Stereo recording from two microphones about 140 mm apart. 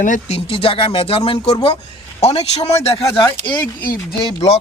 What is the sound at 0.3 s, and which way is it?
Speech, 40° left (ahead or behind).